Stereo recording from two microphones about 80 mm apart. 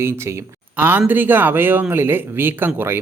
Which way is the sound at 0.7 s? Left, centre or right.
Right.